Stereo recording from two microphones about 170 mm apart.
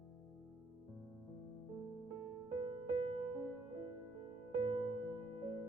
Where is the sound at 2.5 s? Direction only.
25° right (ahead or behind).